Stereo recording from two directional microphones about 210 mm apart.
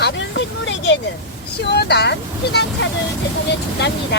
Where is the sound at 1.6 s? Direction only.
50° left (ahead or behind).